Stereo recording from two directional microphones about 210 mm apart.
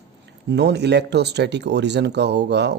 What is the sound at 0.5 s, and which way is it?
Speech, 55° right (ahead or behind).